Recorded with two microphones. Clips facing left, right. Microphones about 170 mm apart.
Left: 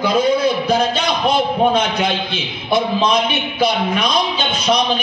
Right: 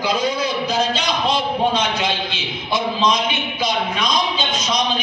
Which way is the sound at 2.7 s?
55° left (ahead or behind).